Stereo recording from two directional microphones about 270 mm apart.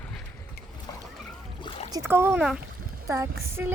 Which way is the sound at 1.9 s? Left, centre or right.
Centre.